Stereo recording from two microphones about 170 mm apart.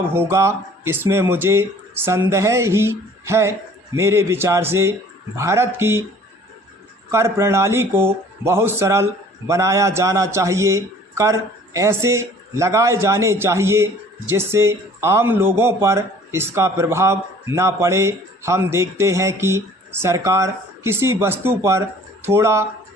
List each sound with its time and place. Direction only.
0.1 s a man's voice: 15° right (ahead or behind)
7.1 s a man's voice: 15° right (ahead or behind)